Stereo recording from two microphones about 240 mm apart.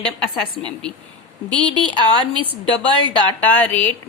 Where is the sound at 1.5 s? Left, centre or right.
Centre.